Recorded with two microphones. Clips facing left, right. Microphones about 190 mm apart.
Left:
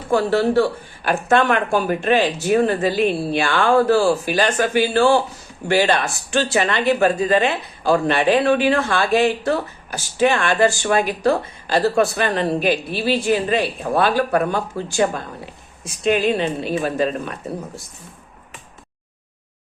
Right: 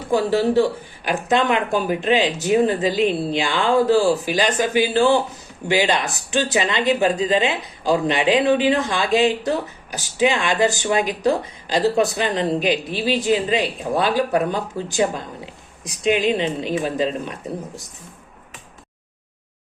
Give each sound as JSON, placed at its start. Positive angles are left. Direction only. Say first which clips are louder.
{"t": 0.1, "sound": "speech", "louder": "left 1 dB", "side_deg": -15}